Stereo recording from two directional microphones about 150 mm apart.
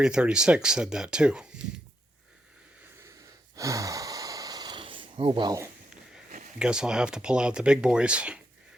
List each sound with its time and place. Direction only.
0.0 s speech: 5° right (ahead or behind)
3.5 s gasp: 20° right (ahead or behind)
6.6 s speech: 5° right (ahead or behind)